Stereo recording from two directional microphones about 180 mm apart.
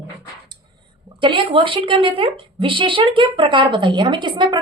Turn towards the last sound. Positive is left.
turn(degrees=-25)  # may be behind; listen again after turning